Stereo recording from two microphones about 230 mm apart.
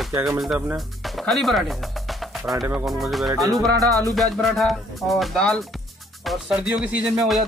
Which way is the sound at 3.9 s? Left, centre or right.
Centre.